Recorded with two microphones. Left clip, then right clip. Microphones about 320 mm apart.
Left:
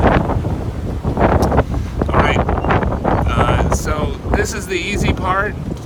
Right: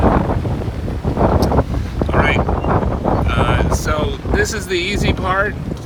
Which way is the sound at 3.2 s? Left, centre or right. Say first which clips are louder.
Left 1 dB; centre.